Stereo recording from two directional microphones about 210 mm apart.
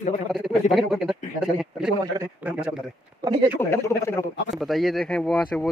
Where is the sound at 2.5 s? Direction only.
5° right (ahead or behind).